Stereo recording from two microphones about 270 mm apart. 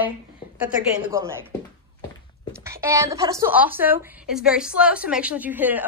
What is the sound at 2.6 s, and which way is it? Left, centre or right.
A woman's voice, centre.